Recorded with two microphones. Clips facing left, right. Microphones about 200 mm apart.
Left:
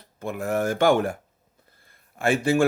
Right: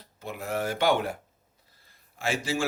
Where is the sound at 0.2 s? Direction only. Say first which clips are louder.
Left 6 dB; 50° left (ahead or behind).